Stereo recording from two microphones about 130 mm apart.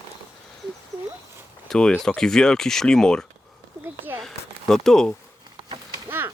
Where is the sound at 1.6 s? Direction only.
5° left (ahead or behind).